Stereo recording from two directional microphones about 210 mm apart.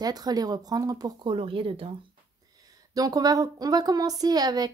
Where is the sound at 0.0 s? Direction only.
20° right (ahead or behind).